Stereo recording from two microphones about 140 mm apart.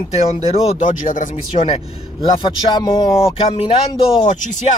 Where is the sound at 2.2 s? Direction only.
35° left (ahead or behind).